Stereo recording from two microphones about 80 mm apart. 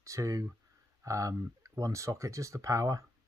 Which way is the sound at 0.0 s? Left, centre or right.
Right.